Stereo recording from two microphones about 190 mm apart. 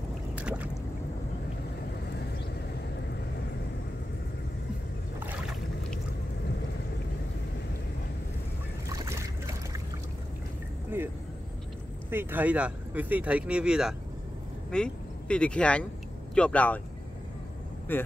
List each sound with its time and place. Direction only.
0.4 s boat: 5° right (ahead or behind)
5.2 s boat: 10° right (ahead or behind)
8.8 s boat: 15° right (ahead or behind)
10.9 s vehicle: 10° right (ahead or behind)
12.1 s speech: 10° right (ahead or behind); by 16.8 s 10° left (ahead or behind)
17.9 s speech: 10° left (ahead or behind)